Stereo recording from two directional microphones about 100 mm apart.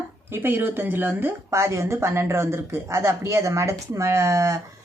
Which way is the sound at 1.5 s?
30° right (ahead or behind).